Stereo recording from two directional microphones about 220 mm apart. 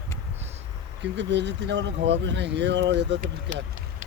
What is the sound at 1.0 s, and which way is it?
Speech, 50° right (ahead or behind).